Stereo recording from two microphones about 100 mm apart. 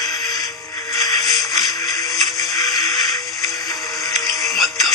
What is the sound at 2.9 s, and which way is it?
Music, centre (ahead or behind).